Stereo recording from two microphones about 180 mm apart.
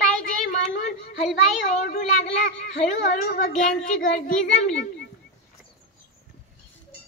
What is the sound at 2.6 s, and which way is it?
A child's voice, 50° left (ahead or behind).